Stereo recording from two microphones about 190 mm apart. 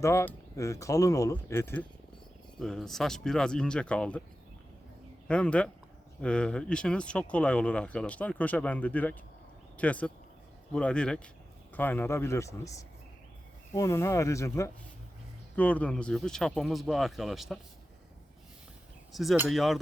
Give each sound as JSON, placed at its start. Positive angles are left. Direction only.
{"t": 0.0, "sound": "speech", "side_deg": 15}
{"t": 2.6, "sound": "speech", "side_deg": 0}
{"t": 5.3, "sound": "speech", "side_deg": 5}
{"t": 19.1, "sound": "speech", "side_deg": 0}